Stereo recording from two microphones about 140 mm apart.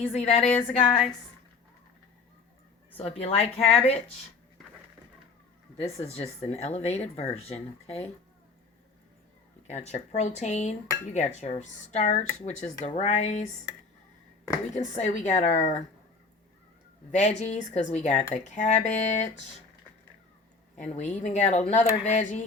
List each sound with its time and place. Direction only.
0.0 s cutlery: 45° left (ahead or behind)
0.4 s a sound: 5° left (ahead or behind)
3.0 s cutlery: 45° left (ahead or behind)
5.7 s cutlery: 45° left (ahead or behind)
9.6 s cutlery: 50° left (ahead or behind)
12.5 s a woman's voice: 55° left (ahead or behind)
14.8 s a woman's voice: 60° left (ahead or behind)
17.1 s a woman's voice: 55° left (ahead or behind)
20.7 s a woman's voice: 60° left (ahead or behind)